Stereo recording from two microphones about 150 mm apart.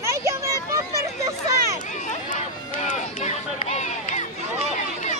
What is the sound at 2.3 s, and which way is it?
Run, 55° left (ahead or behind).